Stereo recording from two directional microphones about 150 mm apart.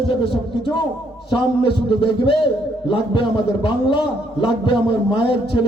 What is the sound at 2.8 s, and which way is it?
A man's voice, 35° left (ahead or behind).